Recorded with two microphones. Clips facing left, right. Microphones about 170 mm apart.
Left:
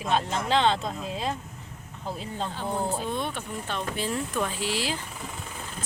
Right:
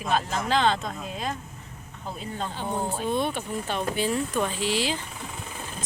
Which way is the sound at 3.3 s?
Centre (ahead or behind).